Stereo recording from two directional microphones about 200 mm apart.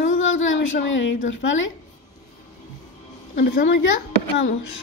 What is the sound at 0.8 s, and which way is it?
Speech, 70° left (ahead or behind).